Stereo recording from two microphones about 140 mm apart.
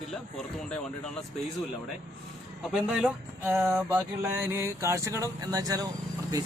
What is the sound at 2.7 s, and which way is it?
A man's voice, 5° right (ahead or behind).